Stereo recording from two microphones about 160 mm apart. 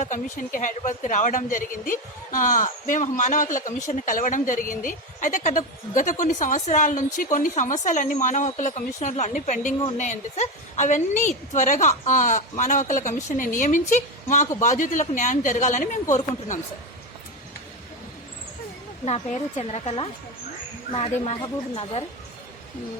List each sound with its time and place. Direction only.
0.0 s a woman's voice: 50° left (ahead or behind)
19.0 s a woman's voice: 40° left (ahead or behind)